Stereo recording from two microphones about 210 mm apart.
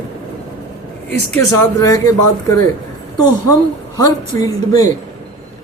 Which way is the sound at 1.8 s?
15° left (ahead or behind).